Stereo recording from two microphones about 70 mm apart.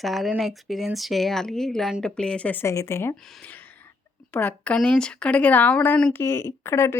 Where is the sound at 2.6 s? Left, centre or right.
Left.